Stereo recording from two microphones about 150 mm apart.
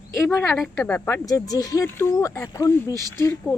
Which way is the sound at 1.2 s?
25° left (ahead or behind).